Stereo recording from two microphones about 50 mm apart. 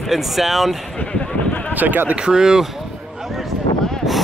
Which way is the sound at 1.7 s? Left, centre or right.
Right.